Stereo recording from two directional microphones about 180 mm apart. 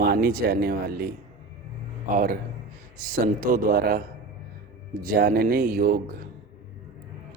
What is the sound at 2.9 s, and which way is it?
A man's voice, 50° right (ahead or behind).